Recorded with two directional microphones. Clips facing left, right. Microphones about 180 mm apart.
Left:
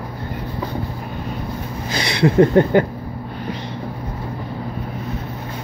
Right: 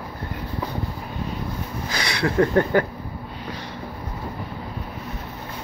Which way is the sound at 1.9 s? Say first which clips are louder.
Left 6 dB; 25° left (ahead or behind).